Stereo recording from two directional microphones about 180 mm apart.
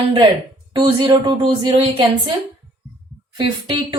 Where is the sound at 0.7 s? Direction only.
30° right (ahead or behind).